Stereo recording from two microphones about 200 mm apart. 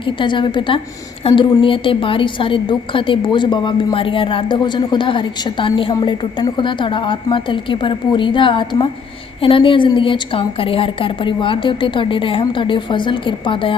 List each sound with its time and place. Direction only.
0.0 s a woman's voice: 25° left (ahead or behind)